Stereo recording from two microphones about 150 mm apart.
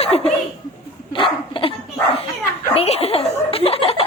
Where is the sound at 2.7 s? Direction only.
40° left (ahead or behind).